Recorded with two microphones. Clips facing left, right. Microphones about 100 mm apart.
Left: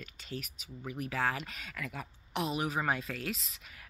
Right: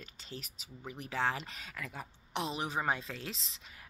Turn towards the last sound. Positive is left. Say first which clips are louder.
# left 1 dB
turn(degrees=-30)  # may be behind; listen again after turning